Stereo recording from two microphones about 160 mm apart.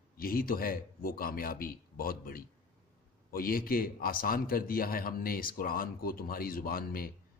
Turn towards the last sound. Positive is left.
turn(degrees=65)  # may be behind; listen again after turning